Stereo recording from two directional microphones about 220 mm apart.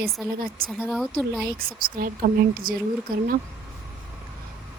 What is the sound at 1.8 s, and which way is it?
A woman's voice, 40° right (ahead or behind).